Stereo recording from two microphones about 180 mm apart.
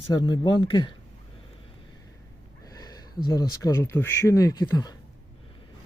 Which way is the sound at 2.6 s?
20° left (ahead or behind).